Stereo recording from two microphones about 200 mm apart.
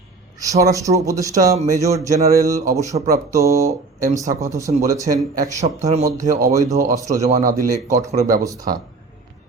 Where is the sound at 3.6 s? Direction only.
35° right (ahead or behind).